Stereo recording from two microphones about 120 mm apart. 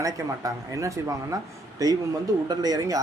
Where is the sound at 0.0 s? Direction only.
25° right (ahead or behind).